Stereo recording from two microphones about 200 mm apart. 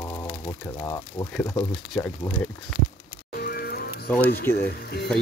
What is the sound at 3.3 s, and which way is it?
Music, 50° left (ahead or behind).